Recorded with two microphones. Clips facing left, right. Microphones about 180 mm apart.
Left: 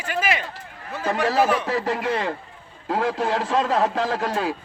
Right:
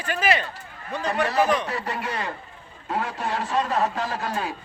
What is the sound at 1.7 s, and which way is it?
A man's voice, 90° left.